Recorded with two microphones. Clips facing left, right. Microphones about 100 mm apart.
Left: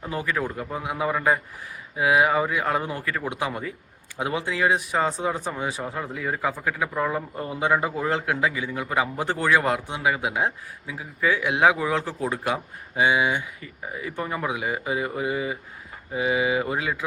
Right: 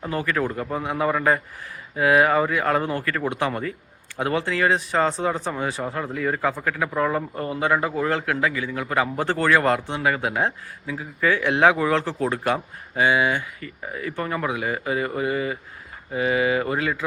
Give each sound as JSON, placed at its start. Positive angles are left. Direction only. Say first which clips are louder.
{"t": 0.1, "sound": "a man's voice", "louder": "right 3 dB", "side_deg": 10}